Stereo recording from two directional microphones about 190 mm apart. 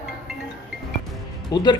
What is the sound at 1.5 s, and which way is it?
Speech, 20° left (ahead or behind).